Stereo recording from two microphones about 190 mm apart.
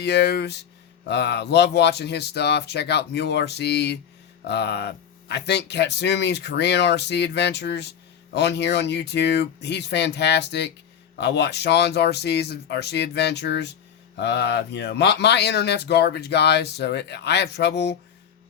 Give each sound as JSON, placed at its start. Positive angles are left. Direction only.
{"t": 0.0, "sound": "speech", "side_deg": 60}